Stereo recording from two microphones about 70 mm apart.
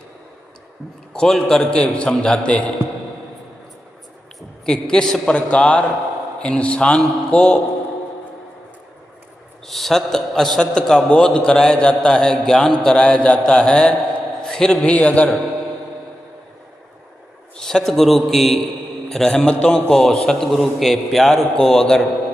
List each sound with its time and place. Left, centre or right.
1.1 s a man's voice: centre
4.4 s a sound: centre
5.2 s a man's voice: centre
9.6 s a man's voice: centre
14.4 s a sound: centre
14.8 s a man's voice: centre
17.6 s a man's voice: centre